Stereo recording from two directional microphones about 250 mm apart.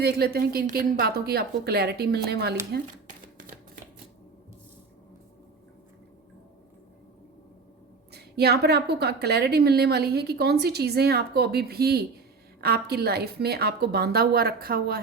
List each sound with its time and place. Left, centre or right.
0.0 s a woman's voice: right
2.7 s a sound: right
8.1 s a woman's voice: right